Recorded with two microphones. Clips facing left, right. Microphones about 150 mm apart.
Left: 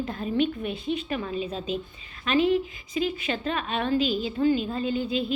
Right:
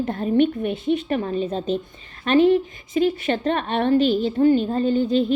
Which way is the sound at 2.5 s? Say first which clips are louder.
Right 5 dB; 55° right (ahead or behind).